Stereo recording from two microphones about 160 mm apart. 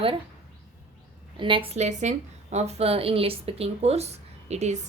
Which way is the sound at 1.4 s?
30° right (ahead or behind).